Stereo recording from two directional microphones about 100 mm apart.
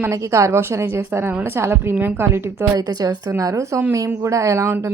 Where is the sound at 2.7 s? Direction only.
40° right (ahead or behind).